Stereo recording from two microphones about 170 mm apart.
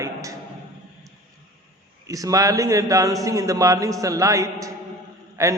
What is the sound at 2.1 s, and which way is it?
A man's voice, 20° right (ahead or behind).